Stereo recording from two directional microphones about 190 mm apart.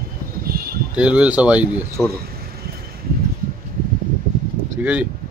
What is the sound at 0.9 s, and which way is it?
Speech, 5° right (ahead or behind).